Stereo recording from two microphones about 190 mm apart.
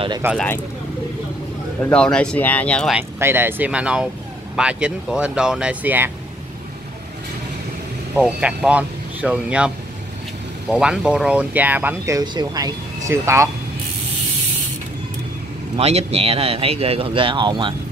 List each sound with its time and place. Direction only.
0.2 s speech: 10° right (ahead or behind)
1.8 s speech: 5° left (ahead or behind)
3.0 s speech: 10° right (ahead or behind)
8.2 s speech: 5° right (ahead or behind)
10.7 s speech: 5° right (ahead or behind)
15.8 s speech: 35° right (ahead or behind)